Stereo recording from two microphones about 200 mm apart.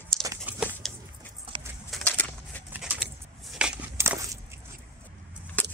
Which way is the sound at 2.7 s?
5° right (ahead or behind).